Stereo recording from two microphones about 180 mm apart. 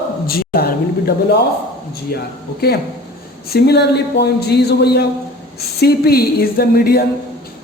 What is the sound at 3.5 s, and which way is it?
A man's voice, 65° left (ahead or behind).